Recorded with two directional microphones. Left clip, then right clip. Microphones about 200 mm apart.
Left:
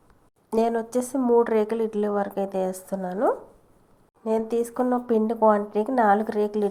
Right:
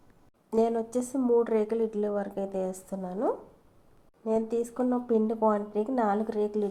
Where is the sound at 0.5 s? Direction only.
25° left (ahead or behind).